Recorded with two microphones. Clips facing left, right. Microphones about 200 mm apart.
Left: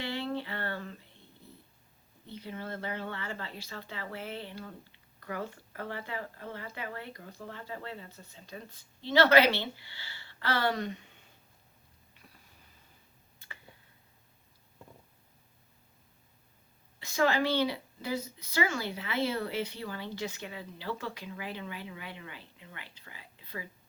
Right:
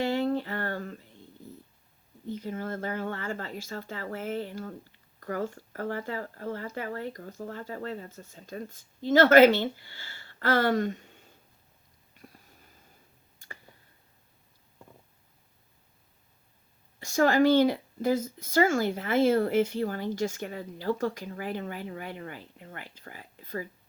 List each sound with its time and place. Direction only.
0.0 s a sound: 45° right (ahead or behind)
2.2 s speech: 45° right (ahead or behind)
17.0 s speech: 45° right (ahead or behind)